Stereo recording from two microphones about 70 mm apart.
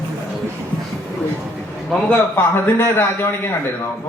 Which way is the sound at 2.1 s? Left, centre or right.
Left.